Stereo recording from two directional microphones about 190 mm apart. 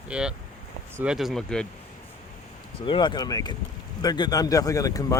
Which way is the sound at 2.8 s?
25° left (ahead or behind).